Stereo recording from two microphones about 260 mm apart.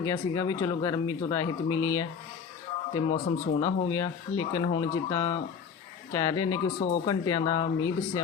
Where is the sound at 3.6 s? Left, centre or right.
Centre.